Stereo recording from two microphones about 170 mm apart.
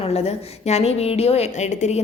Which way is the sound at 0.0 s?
40° left (ahead or behind).